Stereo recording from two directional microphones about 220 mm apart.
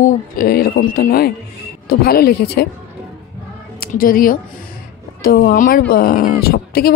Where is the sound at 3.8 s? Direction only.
40° left (ahead or behind).